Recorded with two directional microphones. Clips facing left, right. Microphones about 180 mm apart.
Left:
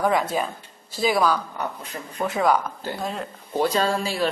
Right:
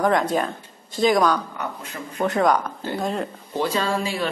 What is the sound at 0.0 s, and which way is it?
Speech, 5° left (ahead or behind).